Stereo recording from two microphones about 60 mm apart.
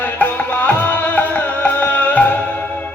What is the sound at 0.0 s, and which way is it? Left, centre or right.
Music, left.